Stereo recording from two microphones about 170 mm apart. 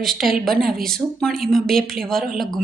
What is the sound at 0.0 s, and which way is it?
A woman's voice, centre (ahead or behind).